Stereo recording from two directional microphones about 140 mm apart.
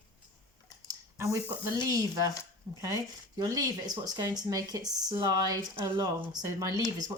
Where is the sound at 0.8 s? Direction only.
20° right (ahead or behind).